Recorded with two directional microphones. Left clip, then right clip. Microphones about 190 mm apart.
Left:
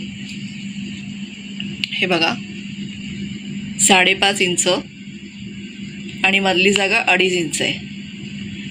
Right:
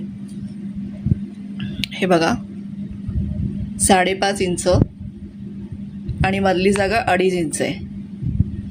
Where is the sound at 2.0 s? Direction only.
40° right (ahead or behind).